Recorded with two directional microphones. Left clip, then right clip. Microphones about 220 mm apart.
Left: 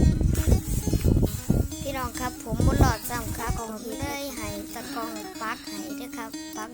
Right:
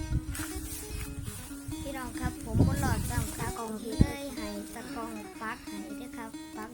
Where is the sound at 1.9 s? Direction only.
45° left (ahead or behind).